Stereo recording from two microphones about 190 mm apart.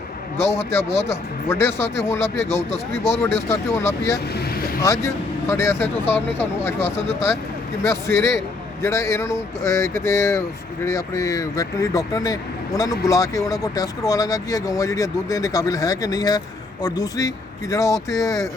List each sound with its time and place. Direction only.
0.3 s speech: 15° left (ahead or behind)
4.4 s vehicle: 50° left (ahead or behind)
4.8 s speech: 15° left (ahead or behind)